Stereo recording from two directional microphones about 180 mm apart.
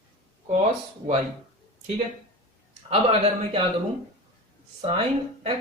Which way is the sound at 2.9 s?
35° right (ahead or behind).